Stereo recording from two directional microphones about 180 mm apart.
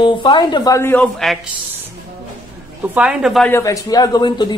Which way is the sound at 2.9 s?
5° right (ahead or behind).